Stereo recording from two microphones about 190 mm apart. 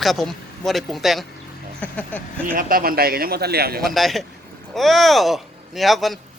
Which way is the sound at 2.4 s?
50° right (ahead or behind).